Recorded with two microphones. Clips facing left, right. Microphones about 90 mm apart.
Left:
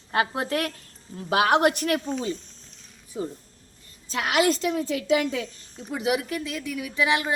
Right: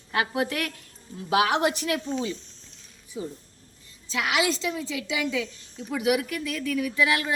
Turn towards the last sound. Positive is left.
turn(degrees=25)  # may be behind; listen again after turning